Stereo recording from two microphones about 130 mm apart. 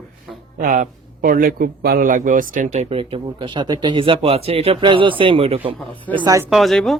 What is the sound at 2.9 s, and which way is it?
Speech, 45° right (ahead or behind).